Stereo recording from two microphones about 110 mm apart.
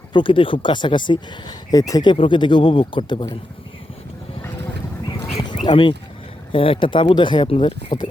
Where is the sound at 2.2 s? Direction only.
45° left (ahead or behind).